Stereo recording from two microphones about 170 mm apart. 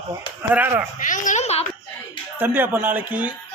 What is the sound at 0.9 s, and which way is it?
Speech, 50° left (ahead or behind).